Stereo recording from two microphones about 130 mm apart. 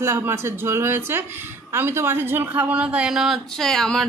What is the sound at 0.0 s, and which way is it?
A man's voice, 20° right (ahead or behind).